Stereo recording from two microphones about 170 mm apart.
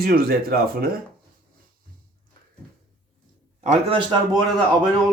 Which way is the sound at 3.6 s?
45° right (ahead or behind).